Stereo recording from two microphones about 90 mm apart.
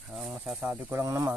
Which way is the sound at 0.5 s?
25° right (ahead or behind).